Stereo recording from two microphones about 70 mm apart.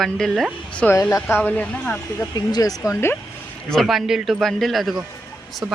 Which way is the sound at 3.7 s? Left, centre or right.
Centre.